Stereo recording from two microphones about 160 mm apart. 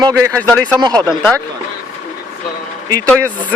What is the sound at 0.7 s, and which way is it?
Speech, 25° right (ahead or behind).